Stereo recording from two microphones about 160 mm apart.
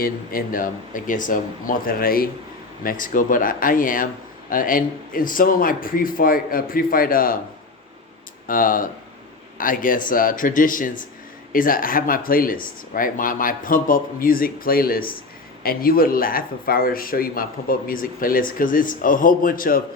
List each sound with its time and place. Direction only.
0.0 s speech: 60° left (ahead or behind)
8.4 s speech: 60° left (ahead or behind)